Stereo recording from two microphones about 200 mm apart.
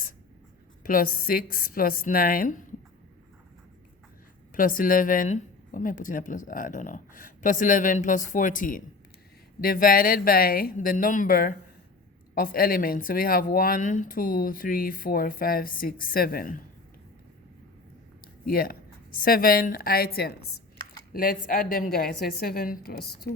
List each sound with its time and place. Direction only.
0.9 s speech: 45° left (ahead or behind)
4.5 s speech: 45° left (ahead or behind)
18.4 s speech: 50° left (ahead or behind)